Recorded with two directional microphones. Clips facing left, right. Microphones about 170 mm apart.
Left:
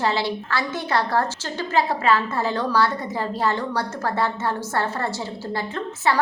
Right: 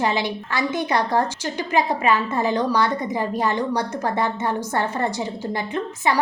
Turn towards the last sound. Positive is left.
turn(degrees=-15)  # may be behind; listen again after turning